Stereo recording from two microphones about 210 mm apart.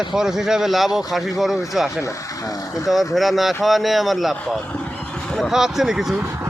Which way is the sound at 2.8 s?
Centre (ahead or behind).